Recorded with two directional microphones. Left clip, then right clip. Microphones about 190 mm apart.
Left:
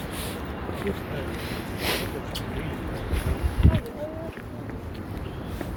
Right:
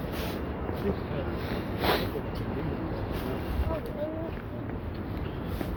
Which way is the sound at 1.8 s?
25° right (ahead or behind).